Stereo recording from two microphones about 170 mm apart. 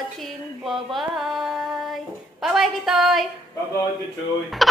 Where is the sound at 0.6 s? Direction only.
Centre (ahead or behind).